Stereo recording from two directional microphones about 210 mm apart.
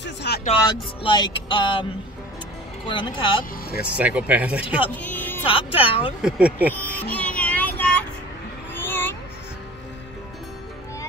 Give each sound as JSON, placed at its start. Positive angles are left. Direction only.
{"t": 0.0, "sound": "music", "side_deg": 55}
{"t": 0.5, "sound": "music", "side_deg": 25}
{"t": 2.9, "sound": "music", "side_deg": 20}
{"t": 3.9, "sound": "speech", "side_deg": -5}
{"t": 4.9, "sound": "music", "side_deg": 10}
{"t": 5.5, "sound": "music", "side_deg": 25}
{"t": 6.2, "sound": "speech", "side_deg": -5}
{"t": 6.7, "sound": "child singing", "side_deg": 10}
{"t": 8.7, "sound": "cat", "side_deg": 10}